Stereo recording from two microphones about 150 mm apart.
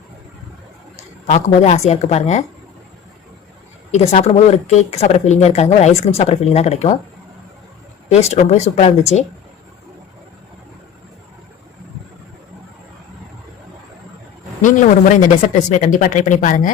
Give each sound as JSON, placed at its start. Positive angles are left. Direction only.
{"t": 1.3, "sound": "speech", "side_deg": 45}
{"t": 3.9, "sound": "speech", "side_deg": 45}
{"t": 8.1, "sound": "speech", "side_deg": 45}
{"t": 14.6, "sound": "speech", "side_deg": 60}